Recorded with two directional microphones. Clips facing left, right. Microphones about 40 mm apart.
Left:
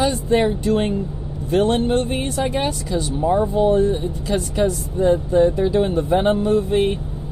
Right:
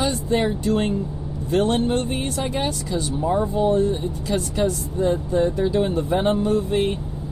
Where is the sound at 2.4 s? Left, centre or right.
Left.